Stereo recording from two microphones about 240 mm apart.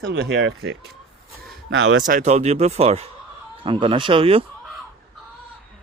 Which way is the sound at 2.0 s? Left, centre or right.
Right.